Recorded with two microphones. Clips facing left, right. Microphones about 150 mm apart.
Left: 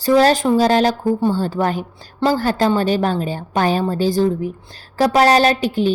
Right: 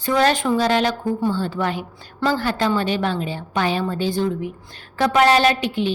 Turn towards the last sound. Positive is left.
turn(degrees=40)  # may be behind; listen again after turning